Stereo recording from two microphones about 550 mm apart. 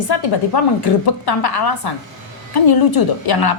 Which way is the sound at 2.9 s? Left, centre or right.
Left.